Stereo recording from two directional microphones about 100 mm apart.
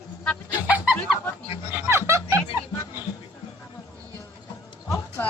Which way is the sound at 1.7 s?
25° right (ahead or behind).